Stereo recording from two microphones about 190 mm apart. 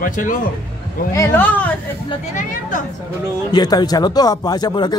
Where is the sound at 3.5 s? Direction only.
20° left (ahead or behind).